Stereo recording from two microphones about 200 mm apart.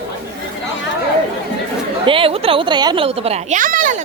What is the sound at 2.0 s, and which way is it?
A child's voice, 25° right (ahead or behind).